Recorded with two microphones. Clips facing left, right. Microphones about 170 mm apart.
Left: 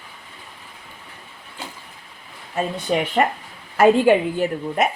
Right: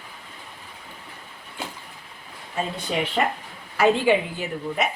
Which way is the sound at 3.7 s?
50° left (ahead or behind).